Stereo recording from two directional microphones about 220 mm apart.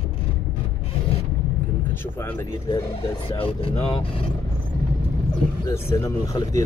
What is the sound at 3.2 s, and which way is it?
Speech, 25° left (ahead or behind).